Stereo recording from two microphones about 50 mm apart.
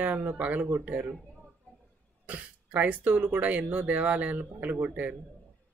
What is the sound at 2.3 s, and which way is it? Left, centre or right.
Speech, right.